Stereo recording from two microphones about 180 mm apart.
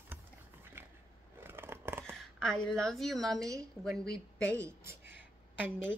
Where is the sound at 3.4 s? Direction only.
20° right (ahead or behind).